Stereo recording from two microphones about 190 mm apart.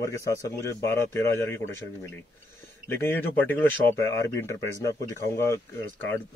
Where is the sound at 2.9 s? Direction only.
10° left (ahead or behind).